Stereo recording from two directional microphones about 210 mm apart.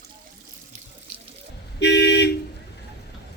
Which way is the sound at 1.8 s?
55° left (ahead or behind).